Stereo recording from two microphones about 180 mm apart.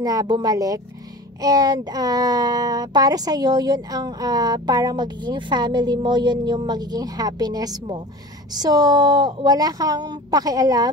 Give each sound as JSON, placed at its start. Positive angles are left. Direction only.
{"t": 0.0, "sound": "speech", "side_deg": -20}